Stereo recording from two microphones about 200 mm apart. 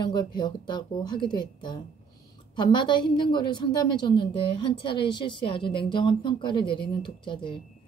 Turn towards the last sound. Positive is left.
turn(degrees=25)  # may be behind; listen again after turning